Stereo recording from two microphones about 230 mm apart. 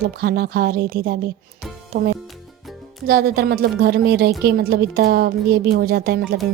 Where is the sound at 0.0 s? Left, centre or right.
Right.